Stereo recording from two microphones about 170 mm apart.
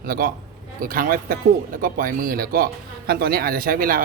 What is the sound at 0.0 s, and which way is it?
A man's voice, 60° right (ahead or behind).